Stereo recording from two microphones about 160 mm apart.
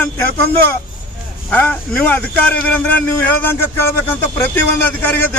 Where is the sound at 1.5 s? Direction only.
10° left (ahead or behind).